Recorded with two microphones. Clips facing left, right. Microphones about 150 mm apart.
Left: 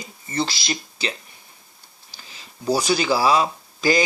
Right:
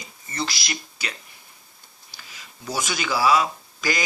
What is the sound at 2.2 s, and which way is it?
Speech, 30° left (ahead or behind).